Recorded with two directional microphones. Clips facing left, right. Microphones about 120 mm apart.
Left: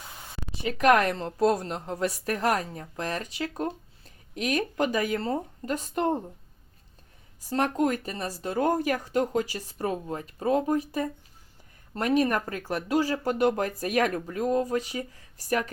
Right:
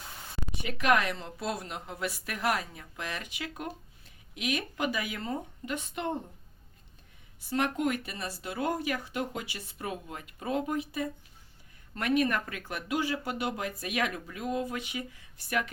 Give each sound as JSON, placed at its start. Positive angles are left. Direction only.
{"t": 0.6, "sound": "speech", "side_deg": 40}
{"t": 7.5, "sound": "speech", "side_deg": 40}